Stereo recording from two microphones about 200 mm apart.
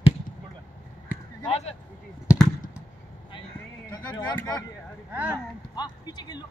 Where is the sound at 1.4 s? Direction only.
30° left (ahead or behind).